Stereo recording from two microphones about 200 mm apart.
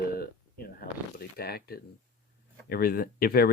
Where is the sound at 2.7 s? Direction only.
50° left (ahead or behind).